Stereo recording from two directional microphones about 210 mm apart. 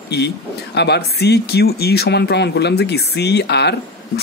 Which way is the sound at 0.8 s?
50° left (ahead or behind).